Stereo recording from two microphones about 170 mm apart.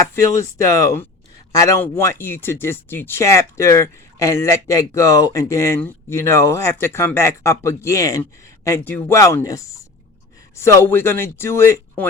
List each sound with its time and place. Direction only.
0.6 s speech: 20° left (ahead or behind)